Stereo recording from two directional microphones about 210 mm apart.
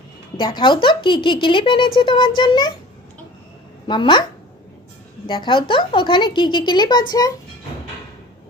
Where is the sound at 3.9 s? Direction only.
20° left (ahead or behind).